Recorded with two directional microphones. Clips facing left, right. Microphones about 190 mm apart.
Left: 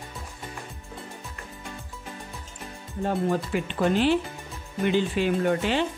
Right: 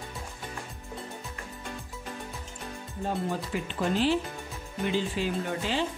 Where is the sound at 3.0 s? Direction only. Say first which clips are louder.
Left 6 dB; 65° left (ahead or behind).